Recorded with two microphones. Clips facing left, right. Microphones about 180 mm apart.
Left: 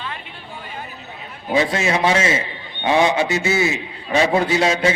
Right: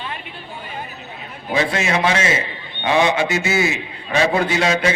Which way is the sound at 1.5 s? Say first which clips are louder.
Left 1 dB; 35° left (ahead or behind).